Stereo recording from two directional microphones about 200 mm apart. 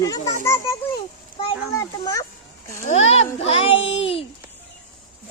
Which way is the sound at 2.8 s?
30° left (ahead or behind).